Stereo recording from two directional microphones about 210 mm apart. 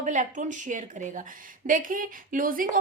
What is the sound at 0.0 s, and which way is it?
A woman's voice, 35° right (ahead or behind).